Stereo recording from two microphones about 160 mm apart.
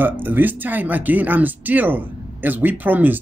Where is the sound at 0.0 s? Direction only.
10° right (ahead or behind).